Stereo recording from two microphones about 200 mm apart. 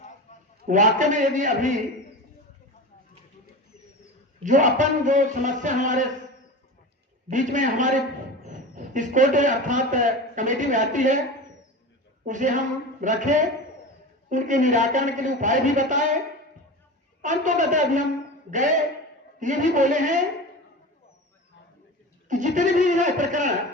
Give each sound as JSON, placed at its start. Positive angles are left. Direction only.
{"t": 0.7, "sound": "a man's voice", "side_deg": -40}
{"t": 4.4, "sound": "a man's voice", "side_deg": -40}
{"t": 7.3, "sound": "a man's voice", "side_deg": -40}
{"t": 12.2, "sound": "a man's voice", "side_deg": -40}
{"t": 17.2, "sound": "a man's voice", "side_deg": -40}
{"t": 19.4, "sound": "a man's voice", "side_deg": -40}
{"t": 22.3, "sound": "a man's voice", "side_deg": -40}